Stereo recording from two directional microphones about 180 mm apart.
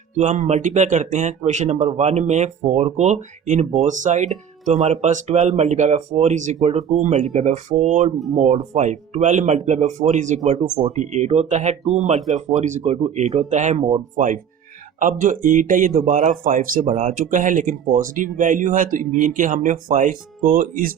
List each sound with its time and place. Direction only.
0.2 s speech: 40° right (ahead or behind)